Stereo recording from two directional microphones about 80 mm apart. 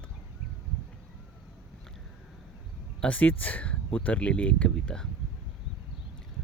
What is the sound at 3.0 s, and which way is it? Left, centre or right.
Speech, centre.